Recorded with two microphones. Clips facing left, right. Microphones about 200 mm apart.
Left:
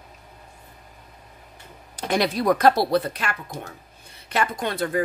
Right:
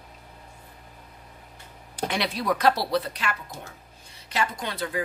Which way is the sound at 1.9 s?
45° left (ahead or behind).